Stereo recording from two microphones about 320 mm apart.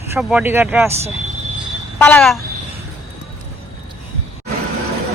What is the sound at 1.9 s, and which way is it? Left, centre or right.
Speech, centre.